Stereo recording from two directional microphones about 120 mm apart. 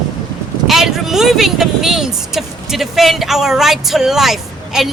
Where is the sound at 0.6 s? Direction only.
Centre (ahead or behind).